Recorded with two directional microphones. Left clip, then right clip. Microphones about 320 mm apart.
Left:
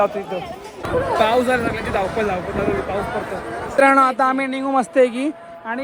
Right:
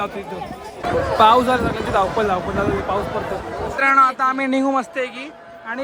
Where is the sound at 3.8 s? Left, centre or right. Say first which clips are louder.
Left 1 dB; centre.